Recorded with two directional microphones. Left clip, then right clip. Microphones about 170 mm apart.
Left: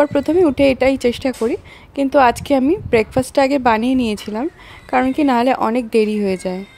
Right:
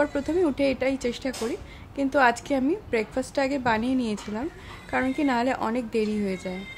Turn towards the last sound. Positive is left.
turn(degrees=50)  # may be behind; listen again after turning